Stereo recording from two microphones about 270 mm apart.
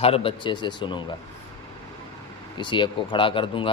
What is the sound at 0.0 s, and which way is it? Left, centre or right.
A man's voice, centre.